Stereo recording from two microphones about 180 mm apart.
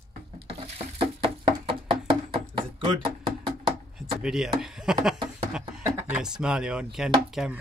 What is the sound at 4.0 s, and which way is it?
Speech, centre (ahead or behind).